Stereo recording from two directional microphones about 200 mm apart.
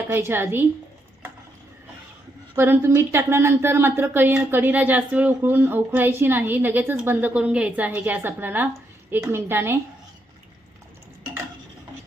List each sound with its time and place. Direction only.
0.1 s speech: 10° right (ahead or behind)
2.6 s speech: 10° right (ahead or behind)